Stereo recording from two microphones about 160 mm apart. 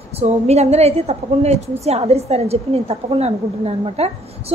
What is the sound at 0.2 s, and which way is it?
A woman's voice, 40° right (ahead or behind).